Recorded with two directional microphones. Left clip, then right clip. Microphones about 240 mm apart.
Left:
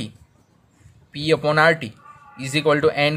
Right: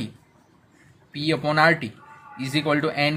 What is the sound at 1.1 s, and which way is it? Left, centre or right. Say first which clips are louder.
Speech: left 4 dB; left.